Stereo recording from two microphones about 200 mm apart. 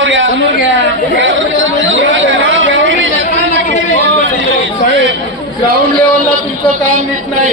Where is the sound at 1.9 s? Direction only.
70° right (ahead or behind).